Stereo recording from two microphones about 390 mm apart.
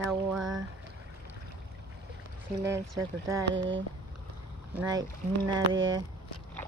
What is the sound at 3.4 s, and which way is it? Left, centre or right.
Speech, right.